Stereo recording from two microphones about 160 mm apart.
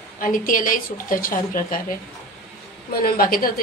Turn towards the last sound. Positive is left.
turn(degrees=65)  # may be behind; listen again after turning